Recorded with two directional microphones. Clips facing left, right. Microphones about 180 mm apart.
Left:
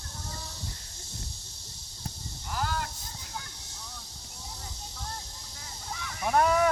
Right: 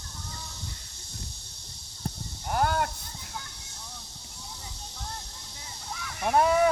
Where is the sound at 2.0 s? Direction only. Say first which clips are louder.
Right 6 dB; 55° right (ahead or behind).